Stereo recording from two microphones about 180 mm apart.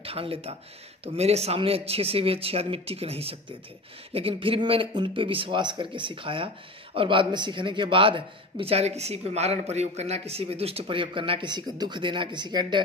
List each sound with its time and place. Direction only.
0.0 s speech: 30° right (ahead or behind)